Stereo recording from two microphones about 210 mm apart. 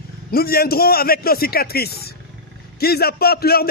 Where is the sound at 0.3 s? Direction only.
45° left (ahead or behind).